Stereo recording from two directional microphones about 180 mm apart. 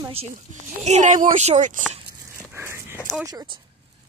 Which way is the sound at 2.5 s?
10° right (ahead or behind).